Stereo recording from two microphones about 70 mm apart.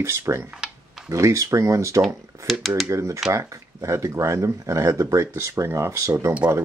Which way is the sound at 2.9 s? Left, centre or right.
Right.